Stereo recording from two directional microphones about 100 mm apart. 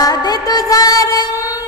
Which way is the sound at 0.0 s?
40° left (ahead or behind).